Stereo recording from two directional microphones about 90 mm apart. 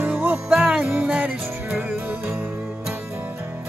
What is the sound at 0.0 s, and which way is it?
Music, 20° right (ahead or behind).